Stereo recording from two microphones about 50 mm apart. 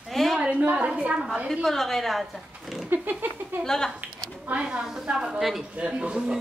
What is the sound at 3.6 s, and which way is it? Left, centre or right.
Speech, centre.